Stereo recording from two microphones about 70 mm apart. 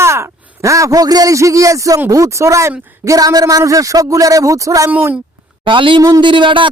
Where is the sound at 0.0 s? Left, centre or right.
Right.